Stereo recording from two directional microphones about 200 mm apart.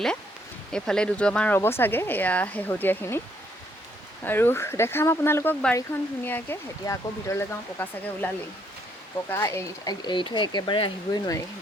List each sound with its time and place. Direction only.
0.7 s speech: 5° left (ahead or behind)
4.2 s speech: 10° left (ahead or behind)
9.3 s speech: 15° left (ahead or behind)